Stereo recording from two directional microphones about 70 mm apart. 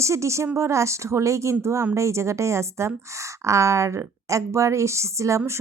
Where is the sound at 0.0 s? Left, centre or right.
Right.